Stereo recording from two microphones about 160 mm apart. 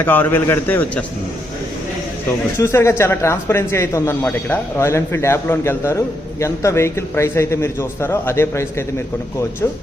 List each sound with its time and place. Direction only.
0.0 s a man's voice: 10° left (ahead or behind)
2.6 s a man's voice: 15° left (ahead or behind)